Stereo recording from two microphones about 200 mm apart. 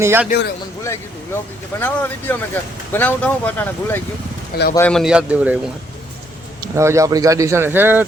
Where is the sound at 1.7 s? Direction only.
10° left (ahead or behind); by 5.6 s 5° right (ahead or behind).